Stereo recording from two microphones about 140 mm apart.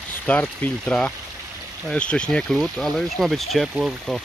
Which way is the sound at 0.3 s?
10° left (ahead or behind).